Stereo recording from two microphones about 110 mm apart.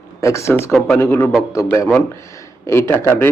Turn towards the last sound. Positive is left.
turn(degrees=20)  # may be behind; listen again after turning